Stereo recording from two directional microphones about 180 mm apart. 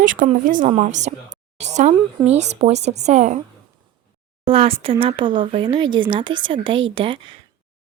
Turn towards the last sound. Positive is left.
turn(degrees=-30)  # may be behind; listen again after turning